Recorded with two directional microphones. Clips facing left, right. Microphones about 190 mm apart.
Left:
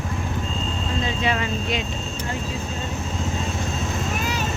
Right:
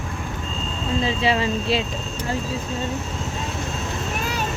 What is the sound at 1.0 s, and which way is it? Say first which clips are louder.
Speech: right 4 dB; 30° right (ahead or behind).